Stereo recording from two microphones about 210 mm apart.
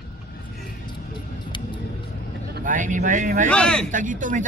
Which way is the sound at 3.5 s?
5° left (ahead or behind).